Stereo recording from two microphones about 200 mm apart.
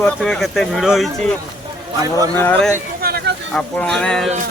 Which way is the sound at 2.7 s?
50° right (ahead or behind).